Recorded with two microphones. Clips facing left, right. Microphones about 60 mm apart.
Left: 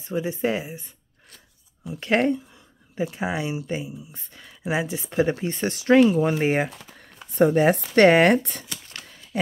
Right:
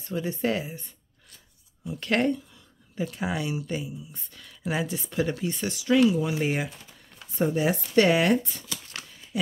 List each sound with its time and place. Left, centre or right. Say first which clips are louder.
0.0 s speech: left 3 dB; centre
1.9 s speech: left 3 dB; left
7.3 s speech: left 7 dB; left
9.3 s a sound: left 4 dB; left